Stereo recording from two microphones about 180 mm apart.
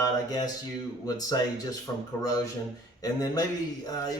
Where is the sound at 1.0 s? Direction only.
20° left (ahead or behind).